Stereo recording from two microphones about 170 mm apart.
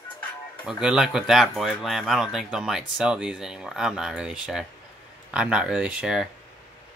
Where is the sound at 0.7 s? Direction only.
5° right (ahead or behind).